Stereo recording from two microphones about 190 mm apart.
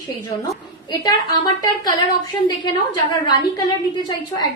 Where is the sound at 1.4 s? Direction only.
20° left (ahead or behind).